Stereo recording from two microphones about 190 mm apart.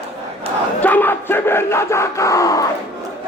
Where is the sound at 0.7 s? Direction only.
10° left (ahead or behind).